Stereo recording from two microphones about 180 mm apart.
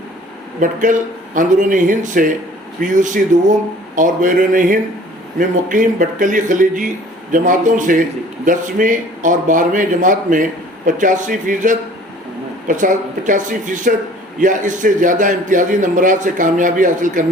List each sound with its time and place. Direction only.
0.6 s a man's voice: 45° right (ahead or behind)